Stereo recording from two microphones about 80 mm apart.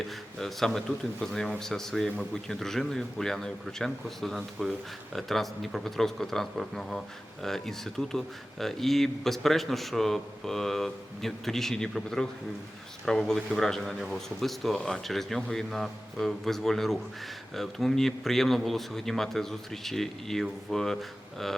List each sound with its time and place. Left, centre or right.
0.3 s speech: centre